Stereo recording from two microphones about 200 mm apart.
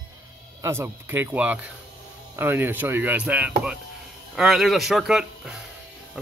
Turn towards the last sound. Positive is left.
turn(degrees=0)  # may be behind; listen again after turning